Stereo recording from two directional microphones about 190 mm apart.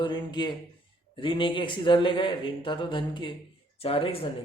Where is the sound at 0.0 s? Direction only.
25° left (ahead or behind).